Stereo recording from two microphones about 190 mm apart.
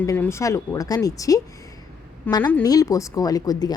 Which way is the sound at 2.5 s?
20° left (ahead or behind).